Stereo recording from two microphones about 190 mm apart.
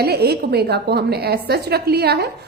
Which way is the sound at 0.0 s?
55° right (ahead or behind).